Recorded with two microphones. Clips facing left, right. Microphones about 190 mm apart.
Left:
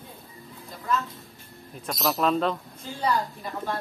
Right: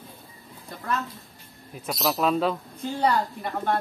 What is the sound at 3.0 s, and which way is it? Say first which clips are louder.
Speech: right 2 dB; 60° right (ahead or behind).